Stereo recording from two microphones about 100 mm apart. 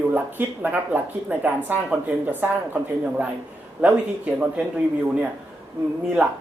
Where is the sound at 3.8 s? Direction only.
15° right (ahead or behind).